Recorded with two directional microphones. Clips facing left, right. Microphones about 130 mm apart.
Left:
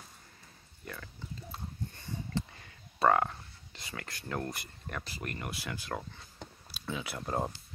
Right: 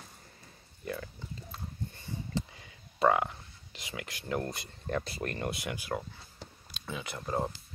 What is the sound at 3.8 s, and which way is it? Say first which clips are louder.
Speech: right 2 dB; 15° right (ahead or behind).